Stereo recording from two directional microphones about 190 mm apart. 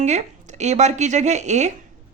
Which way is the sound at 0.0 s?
35° right (ahead or behind).